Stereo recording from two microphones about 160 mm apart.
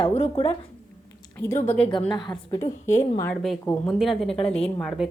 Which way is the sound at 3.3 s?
Centre (ahead or behind).